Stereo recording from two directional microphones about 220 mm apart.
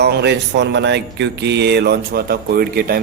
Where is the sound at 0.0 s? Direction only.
50° right (ahead or behind).